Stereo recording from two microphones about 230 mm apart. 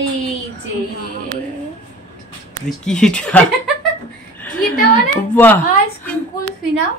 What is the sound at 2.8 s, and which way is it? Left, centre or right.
Speech, centre.